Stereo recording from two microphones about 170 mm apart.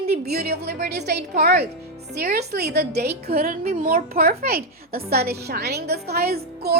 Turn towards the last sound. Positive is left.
turn(degrees=-70)  # may be behind; listen again after turning